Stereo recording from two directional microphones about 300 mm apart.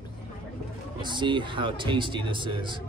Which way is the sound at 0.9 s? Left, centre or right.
Centre.